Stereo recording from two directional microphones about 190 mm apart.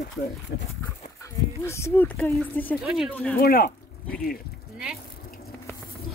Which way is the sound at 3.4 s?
50° left (ahead or behind).